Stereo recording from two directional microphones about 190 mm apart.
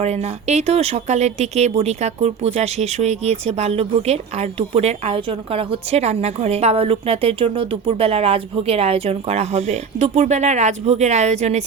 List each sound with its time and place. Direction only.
0.0 s speech: 35° right (ahead or behind)